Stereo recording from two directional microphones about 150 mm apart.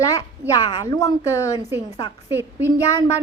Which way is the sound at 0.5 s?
25° left (ahead or behind).